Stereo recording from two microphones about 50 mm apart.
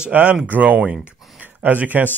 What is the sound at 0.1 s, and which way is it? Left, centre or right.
A man's voice, right.